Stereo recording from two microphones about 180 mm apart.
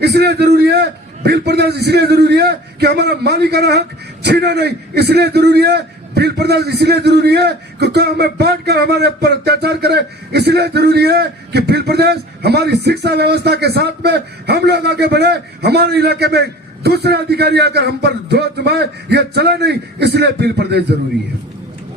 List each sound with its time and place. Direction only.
0.0 s a man's voice: 65° right (ahead or behind)